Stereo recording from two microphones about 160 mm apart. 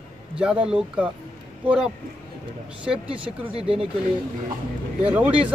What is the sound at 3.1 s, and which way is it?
Speech, 35° right (ahead or behind).